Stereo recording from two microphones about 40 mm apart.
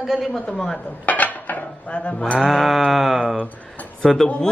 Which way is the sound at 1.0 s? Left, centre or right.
Left.